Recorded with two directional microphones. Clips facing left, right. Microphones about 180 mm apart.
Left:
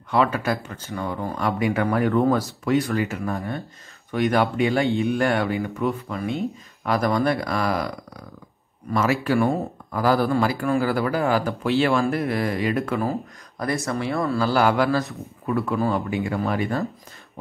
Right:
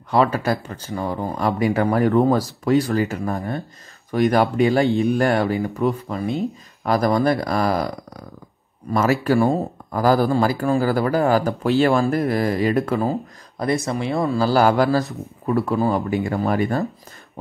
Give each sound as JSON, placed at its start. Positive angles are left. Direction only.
{"t": 0.1, "sound": "speech", "side_deg": -35}
{"t": 8.9, "sound": "speech", "side_deg": -40}
{"t": 13.0, "sound": "speech", "side_deg": -25}
{"t": 14.4, "sound": "speech", "side_deg": -40}